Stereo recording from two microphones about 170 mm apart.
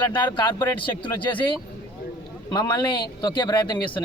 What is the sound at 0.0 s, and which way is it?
A man's voice, 25° left (ahead or behind).